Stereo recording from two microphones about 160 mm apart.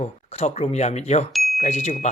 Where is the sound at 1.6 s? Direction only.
40° left (ahead or behind).